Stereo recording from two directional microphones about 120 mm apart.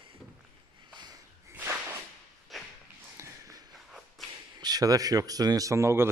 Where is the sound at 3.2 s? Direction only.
25° right (ahead or behind).